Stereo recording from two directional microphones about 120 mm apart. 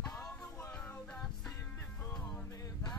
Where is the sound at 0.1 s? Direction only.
20° left (ahead or behind).